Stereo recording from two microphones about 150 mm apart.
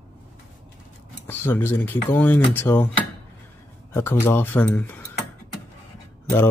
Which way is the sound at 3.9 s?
15° left (ahead or behind).